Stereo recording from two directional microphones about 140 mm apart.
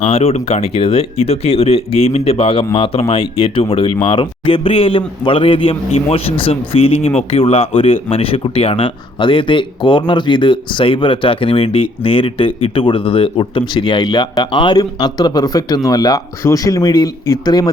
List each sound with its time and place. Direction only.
0.0 s speech: 45° left (ahead or behind); by 17.7 s 30° left (ahead or behind)